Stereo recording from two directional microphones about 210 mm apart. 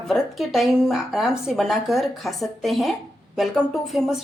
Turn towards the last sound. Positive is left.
turn(degrees=0)  # may be behind; listen again after turning